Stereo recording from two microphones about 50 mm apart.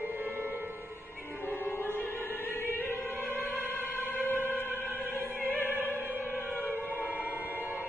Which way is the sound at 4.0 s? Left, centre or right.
Left.